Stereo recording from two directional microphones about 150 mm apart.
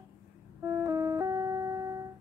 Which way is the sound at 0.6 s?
20° right (ahead or behind).